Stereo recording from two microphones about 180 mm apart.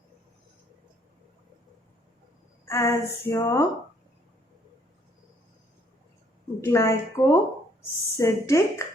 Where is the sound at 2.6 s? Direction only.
15° left (ahead or behind).